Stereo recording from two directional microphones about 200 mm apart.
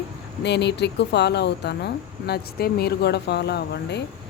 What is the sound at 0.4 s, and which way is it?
A woman's voice, 55° left (ahead or behind).